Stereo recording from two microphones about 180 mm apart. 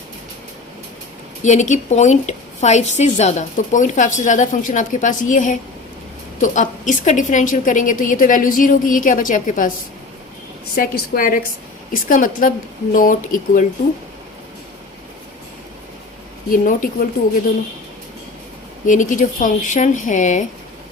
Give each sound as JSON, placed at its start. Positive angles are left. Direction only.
{"t": 1.4, "sound": "a woman's voice", "side_deg": 40}
{"t": 10.8, "sound": "a woman's voice", "side_deg": 55}
{"t": 16.5, "sound": "a woman's voice", "side_deg": 50}
{"t": 18.9, "sound": "a woman's voice", "side_deg": 45}